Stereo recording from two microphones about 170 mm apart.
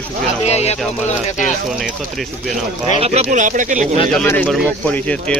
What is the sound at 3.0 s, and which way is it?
Speech, 40° right (ahead or behind).